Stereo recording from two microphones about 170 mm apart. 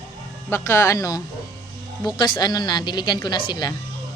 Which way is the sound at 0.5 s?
15° left (ahead or behind).